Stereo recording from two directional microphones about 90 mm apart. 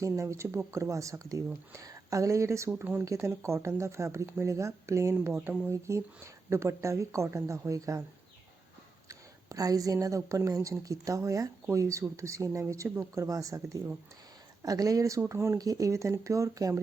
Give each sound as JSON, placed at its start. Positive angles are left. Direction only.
{"t": 0.0, "sound": "speech", "side_deg": -35}
{"t": 2.6, "sound": "speech", "side_deg": -20}
{"t": 3.0, "sound": "speech", "side_deg": -35}
{"t": 9.0, "sound": "speech", "side_deg": -40}